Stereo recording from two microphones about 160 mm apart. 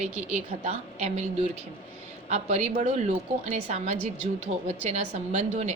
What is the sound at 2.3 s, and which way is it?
A woman's voice, 45° right (ahead or behind).